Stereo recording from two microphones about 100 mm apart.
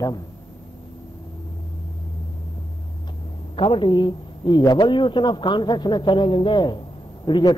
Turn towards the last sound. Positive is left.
turn(degrees=50)  # may be behind; listen again after turning